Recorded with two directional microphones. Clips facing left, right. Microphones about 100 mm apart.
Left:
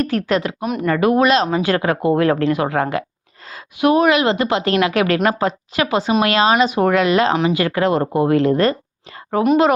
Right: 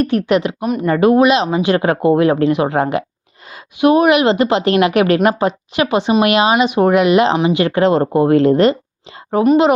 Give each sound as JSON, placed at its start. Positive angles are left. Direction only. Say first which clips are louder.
{"t": 0.3, "sound": "speech", "louder": "right 4 dB", "side_deg": -15}
{"t": 0.6, "sound": "speech", "louder": "right 3 dB", "side_deg": 0}
{"t": 0.9, "sound": "a woman's voice", "louder": "right 4 dB", "side_deg": -25}
{"t": 1.2, "sound": "a woman's voice", "louder": "right 2 dB", "side_deg": -15}